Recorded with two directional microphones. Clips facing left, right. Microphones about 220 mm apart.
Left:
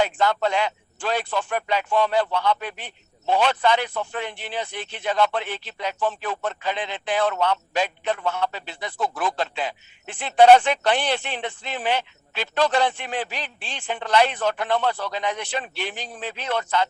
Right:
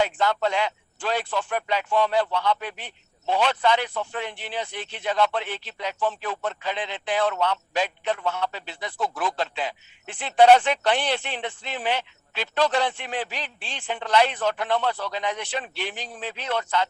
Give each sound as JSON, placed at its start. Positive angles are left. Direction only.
{"t": 0.0, "sound": "speech", "side_deg": 50}